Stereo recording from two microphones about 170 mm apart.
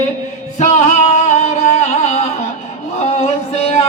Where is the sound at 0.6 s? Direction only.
40° left (ahead or behind).